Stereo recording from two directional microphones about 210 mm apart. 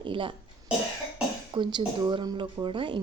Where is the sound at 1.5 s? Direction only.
20° right (ahead or behind).